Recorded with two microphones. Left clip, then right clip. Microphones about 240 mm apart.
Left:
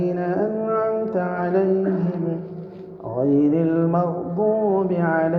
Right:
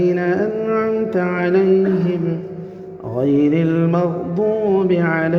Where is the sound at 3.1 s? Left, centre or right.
Right.